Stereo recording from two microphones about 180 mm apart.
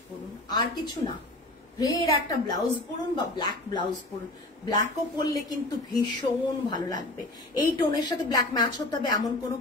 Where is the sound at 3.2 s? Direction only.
25° left (ahead or behind).